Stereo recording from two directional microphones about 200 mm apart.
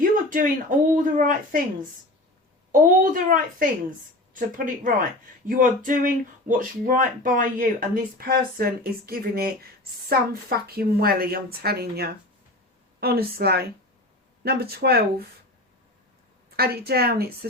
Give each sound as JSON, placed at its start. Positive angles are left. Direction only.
{"t": 0.0, "sound": "a sound", "side_deg": -40}
{"t": 0.9, "sound": "speech", "side_deg": -40}
{"t": 2.8, "sound": "speech", "side_deg": -45}
{"t": 16.6, "sound": "speech", "side_deg": -50}